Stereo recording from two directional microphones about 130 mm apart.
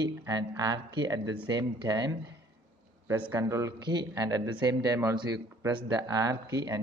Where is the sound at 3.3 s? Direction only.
25° right (ahead or behind).